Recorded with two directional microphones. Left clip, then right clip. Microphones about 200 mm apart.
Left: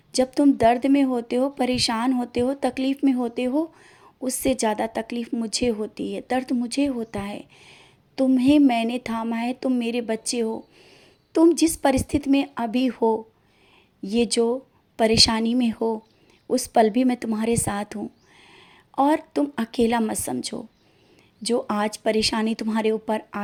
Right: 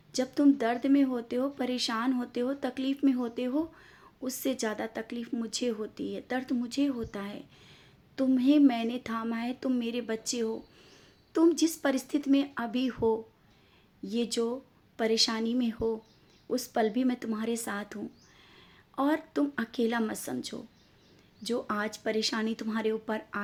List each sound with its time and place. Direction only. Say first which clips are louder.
0.1 s a woman's voice: left 6 dB; 35° left (ahead or behind)